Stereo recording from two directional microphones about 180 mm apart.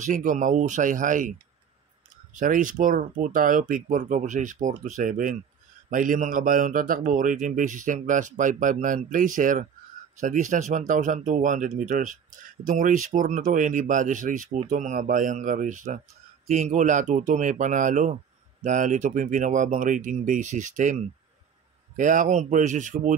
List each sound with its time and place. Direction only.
0.0 s speech: 45° right (ahead or behind)
2.3 s speech: 45° right (ahead or behind)